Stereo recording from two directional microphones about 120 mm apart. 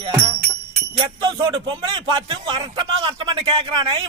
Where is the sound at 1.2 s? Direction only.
40° right (ahead or behind).